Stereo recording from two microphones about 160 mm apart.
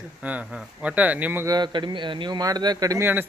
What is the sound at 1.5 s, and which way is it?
A man's voice, 30° right (ahead or behind).